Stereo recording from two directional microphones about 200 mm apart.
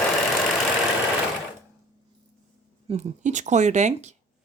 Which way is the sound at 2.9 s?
35° right (ahead or behind).